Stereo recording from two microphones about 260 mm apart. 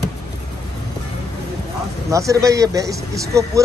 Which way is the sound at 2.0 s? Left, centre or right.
Centre.